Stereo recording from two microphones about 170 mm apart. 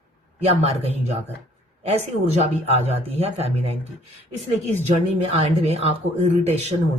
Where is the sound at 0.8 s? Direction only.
35° right (ahead or behind).